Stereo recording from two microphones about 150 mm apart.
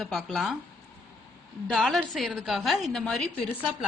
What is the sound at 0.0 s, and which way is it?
Speech, centre (ahead or behind).